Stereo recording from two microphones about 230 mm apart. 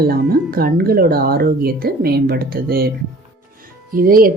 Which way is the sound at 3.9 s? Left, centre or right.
Right.